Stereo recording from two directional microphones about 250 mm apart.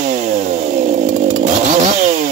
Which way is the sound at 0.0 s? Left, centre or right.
Right.